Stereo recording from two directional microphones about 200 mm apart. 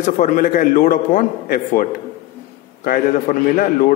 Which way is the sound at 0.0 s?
40° left (ahead or behind).